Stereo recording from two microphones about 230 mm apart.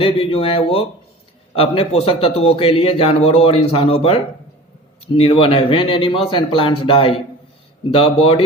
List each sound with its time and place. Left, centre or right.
0.0 s a man's voice: left